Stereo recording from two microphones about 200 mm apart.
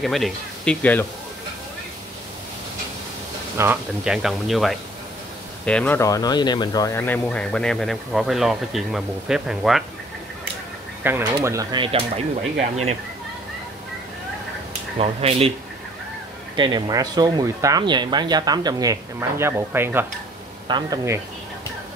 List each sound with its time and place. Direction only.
0.0 s speech: centre (ahead or behind)
3.5 s speech: 10° right (ahead or behind)
11.3 s speech: 20° right (ahead or behind)
15.0 s speech: 30° right (ahead or behind)
16.5 s speech: 25° right (ahead or behind)